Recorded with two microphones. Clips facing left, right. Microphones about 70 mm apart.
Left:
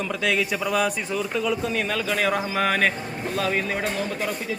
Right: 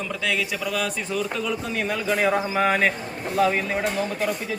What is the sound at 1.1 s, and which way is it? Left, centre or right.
Speech, centre.